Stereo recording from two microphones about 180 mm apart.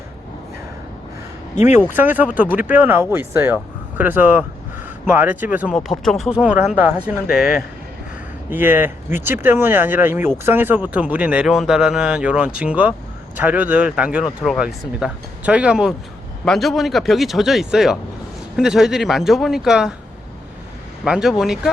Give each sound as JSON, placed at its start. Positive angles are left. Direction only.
{"t": 1.5, "sound": "speech", "side_deg": 40}
{"t": 2.0, "sound": "speech", "side_deg": -10}
{"t": 5.7, "sound": "speech", "side_deg": 0}
{"t": 8.4, "sound": "speech", "side_deg": -10}
{"t": 21.0, "sound": "speech", "side_deg": -5}